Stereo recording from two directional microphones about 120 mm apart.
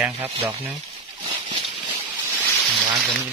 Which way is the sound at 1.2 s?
45° right (ahead or behind).